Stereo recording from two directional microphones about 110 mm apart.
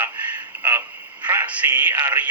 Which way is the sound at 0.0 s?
15° right (ahead or behind).